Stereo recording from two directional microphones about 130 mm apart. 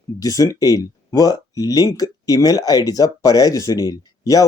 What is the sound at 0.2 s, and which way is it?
Speech, 25° left (ahead or behind).